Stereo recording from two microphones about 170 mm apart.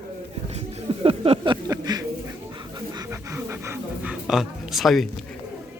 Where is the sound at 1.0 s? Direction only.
30° right (ahead or behind).